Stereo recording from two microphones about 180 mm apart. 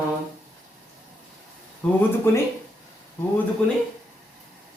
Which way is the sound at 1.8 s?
10° left (ahead or behind).